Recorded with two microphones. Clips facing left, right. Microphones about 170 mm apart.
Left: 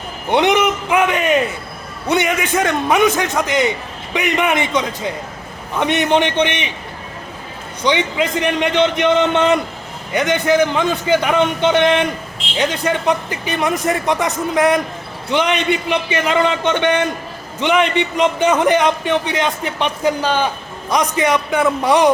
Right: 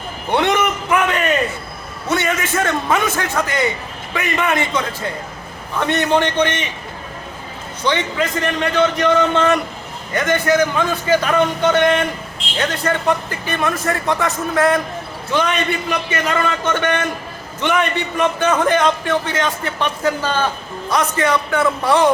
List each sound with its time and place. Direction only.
0.3 s a man's voice: 20° left (ahead or behind)
7.9 s a man's voice: 15° left (ahead or behind)